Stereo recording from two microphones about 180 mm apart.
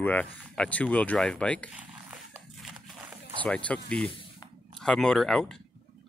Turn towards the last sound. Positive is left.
turn(degrees=0)  # may be behind; listen again after turning